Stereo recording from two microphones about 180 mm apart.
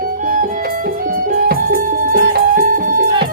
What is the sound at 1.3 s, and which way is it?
Music, 55° right (ahead or behind).